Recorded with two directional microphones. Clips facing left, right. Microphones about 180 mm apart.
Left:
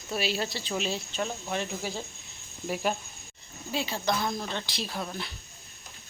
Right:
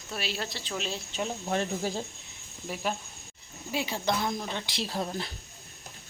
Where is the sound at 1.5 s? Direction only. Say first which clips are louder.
Right 3 dB; 45° right (ahead or behind).